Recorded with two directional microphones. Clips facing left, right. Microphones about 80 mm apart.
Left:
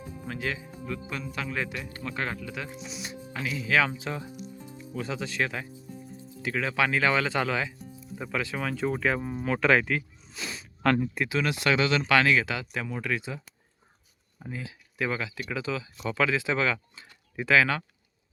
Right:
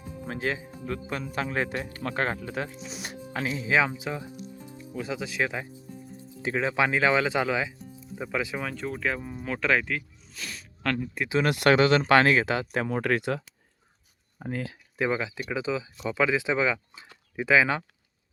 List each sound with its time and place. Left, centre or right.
0.3 s speech: right
3.7 s speech: centre
4.6 s music: right
4.9 s speech: centre
8.6 s speech: centre
10.3 s a sound: centre
11.4 s speech: right
13.0 s speech: right
14.3 s speech: right
14.9 s speech: right